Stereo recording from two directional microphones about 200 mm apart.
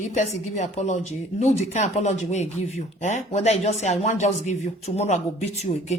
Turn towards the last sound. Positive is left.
turn(degrees=35)  # may be behind; listen again after turning